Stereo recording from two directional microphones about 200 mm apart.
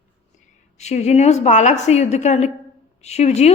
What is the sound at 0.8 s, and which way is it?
A woman's voice, 35° left (ahead or behind).